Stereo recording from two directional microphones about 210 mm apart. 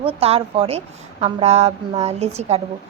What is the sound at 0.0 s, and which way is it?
A woman's voice, 30° right (ahead or behind).